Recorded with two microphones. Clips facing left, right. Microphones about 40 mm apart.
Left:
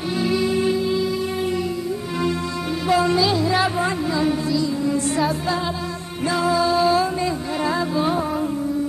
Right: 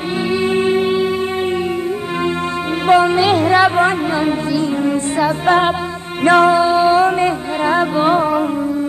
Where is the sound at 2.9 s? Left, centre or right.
Right.